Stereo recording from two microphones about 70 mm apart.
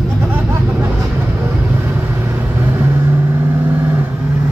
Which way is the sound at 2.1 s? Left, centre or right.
Right.